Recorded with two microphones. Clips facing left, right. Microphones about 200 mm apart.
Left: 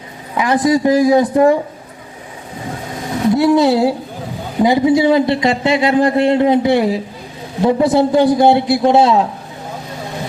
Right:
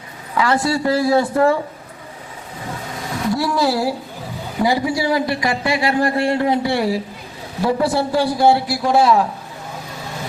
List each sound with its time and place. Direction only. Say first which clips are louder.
0.3 s speech: left 4 dB; 15° left (ahead or behind)
3.2 s speech: left 8 dB; 20° left (ahead or behind)